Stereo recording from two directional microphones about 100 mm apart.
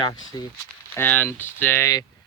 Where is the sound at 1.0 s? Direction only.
20° left (ahead or behind).